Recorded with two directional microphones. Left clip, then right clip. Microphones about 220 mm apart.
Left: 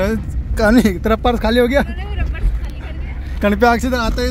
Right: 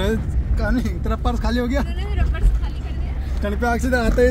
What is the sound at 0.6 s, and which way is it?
Speech, 45° left (ahead or behind).